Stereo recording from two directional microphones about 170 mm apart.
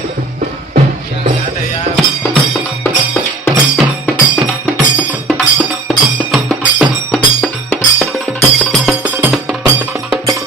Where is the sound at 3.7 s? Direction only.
Centre (ahead or behind).